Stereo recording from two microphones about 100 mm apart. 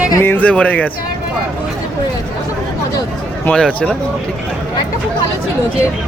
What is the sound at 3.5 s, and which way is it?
Speech, 10° left (ahead or behind).